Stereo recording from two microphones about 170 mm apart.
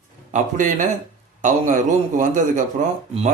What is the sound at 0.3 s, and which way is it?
A man's voice, 45° right (ahead or behind).